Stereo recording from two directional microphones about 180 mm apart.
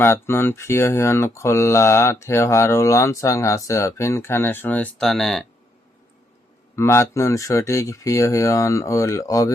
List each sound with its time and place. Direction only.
0.0 s speech: 15° left (ahead or behind)
6.7 s speech: 15° left (ahead or behind)